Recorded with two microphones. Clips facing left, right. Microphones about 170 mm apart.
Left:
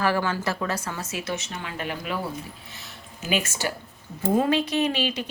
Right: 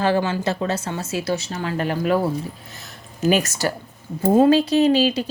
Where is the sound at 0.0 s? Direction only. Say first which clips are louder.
Right 4 dB; 25° right (ahead or behind); by 2.1 s 40° right (ahead or behind).